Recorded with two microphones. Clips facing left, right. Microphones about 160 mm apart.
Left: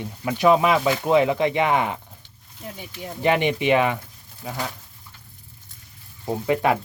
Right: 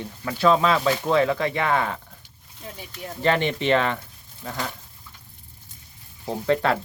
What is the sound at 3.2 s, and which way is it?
Speech, 15° left (ahead or behind).